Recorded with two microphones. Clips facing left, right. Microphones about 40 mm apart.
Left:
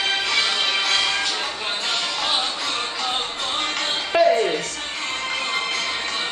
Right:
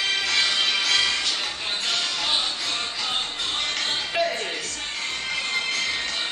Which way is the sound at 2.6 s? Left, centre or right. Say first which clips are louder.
Left 3 dB; left.